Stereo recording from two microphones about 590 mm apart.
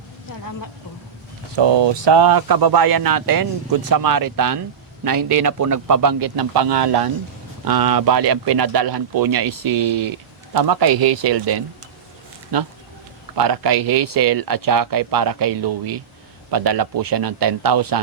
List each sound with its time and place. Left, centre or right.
1.5 s speech: right
13.3 s speech: right